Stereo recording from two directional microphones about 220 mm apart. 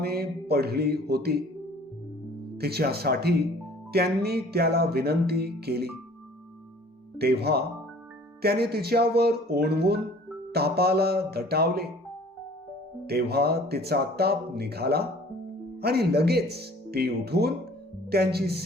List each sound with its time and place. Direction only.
0.0 s speech: 45° right (ahead or behind)
2.6 s speech: 45° right (ahead or behind)
7.2 s speech: 45° right (ahead or behind)
13.1 s speech: 45° right (ahead or behind)